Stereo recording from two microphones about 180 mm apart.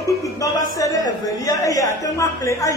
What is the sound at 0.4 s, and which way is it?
A woman's voice, 20° left (ahead or behind).